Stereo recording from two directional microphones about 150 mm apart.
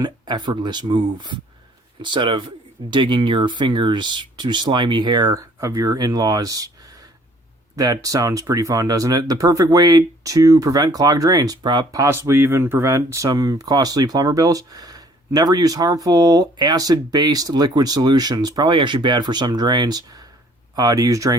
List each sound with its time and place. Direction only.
0.0 s speech: 30° right (ahead or behind)
7.8 s speech: 25° right (ahead or behind)